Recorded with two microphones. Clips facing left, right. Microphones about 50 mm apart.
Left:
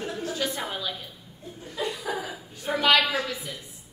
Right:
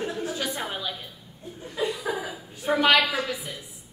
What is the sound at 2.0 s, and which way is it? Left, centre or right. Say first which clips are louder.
Chuckle: right 1 dB; centre.